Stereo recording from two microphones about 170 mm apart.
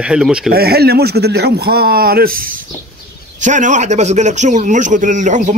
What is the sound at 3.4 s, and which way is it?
A man's voice, 45° right (ahead or behind).